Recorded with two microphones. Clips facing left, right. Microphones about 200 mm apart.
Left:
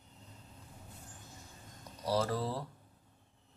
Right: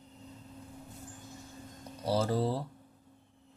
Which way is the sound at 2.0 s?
25° right (ahead or behind).